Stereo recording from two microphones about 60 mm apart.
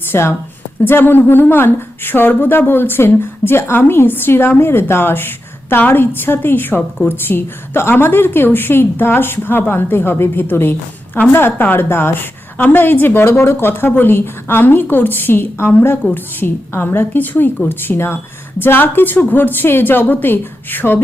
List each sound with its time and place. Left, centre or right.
0.1 s a woman's voice: left